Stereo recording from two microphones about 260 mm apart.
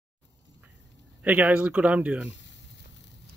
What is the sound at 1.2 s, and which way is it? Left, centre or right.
Speech, centre.